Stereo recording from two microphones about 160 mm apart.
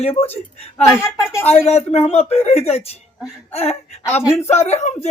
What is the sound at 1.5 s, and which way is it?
Speech, 40° left (ahead or behind).